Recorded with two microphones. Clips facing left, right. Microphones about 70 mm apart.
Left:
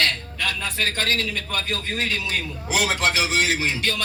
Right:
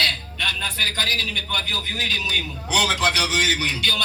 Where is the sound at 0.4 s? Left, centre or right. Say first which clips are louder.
Even; left.